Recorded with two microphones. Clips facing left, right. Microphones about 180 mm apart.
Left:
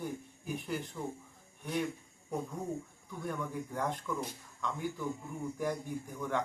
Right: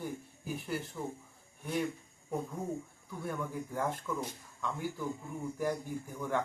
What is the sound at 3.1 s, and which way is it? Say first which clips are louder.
Speech: even; 5° right (ahead or behind).